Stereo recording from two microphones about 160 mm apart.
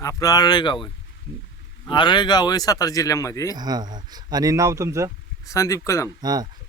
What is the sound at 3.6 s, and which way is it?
Speech, 25° right (ahead or behind).